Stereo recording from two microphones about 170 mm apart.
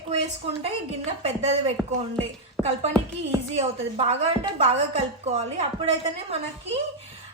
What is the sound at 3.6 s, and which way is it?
A woman's voice, 35° right (ahead or behind).